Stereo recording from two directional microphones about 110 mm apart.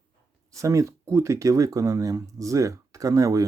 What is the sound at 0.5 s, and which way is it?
Speech, 30° right (ahead or behind).